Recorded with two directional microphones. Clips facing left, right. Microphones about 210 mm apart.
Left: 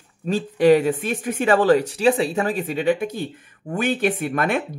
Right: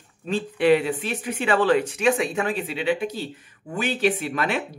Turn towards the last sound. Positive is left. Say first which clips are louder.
# left 3 dB
turn(degrees=50)  # may be behind; listen again after turning